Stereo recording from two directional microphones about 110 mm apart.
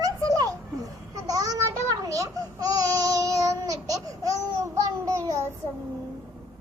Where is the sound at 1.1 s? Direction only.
35° right (ahead or behind).